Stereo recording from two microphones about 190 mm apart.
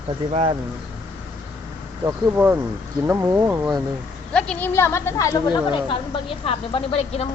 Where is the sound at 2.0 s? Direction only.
10° right (ahead or behind).